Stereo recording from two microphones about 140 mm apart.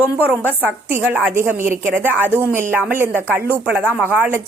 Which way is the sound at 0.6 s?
15° right (ahead or behind).